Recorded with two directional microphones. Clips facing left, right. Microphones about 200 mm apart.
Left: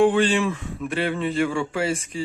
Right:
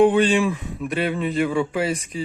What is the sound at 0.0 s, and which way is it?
Speech, 20° right (ahead or behind).